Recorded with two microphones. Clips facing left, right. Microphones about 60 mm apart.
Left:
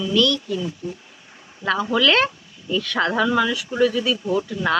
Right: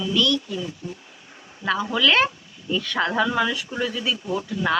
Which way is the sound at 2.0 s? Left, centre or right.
Centre.